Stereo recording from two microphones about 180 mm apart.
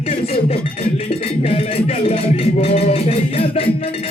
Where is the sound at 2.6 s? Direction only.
35° left (ahead or behind).